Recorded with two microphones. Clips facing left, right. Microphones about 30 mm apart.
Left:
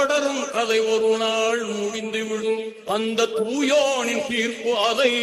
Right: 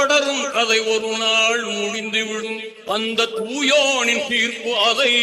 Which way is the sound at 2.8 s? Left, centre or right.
Right.